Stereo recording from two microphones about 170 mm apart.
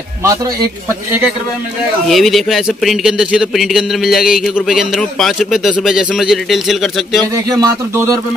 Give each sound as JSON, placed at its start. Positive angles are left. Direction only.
{"t": 0.2, "sound": "speech", "side_deg": -20}
{"t": 2.0, "sound": "a man's voice", "side_deg": 0}
{"t": 7.3, "sound": "speech", "side_deg": -20}